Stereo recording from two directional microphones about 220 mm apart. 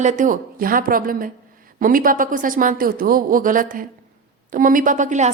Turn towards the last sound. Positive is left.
turn(degrees=-35)  # may be behind; listen again after turning